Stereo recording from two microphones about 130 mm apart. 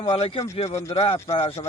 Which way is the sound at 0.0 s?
55° left (ahead or behind).